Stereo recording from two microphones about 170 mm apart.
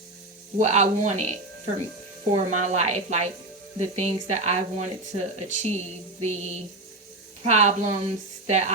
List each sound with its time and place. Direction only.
0.6 s speech: 40° right (ahead or behind)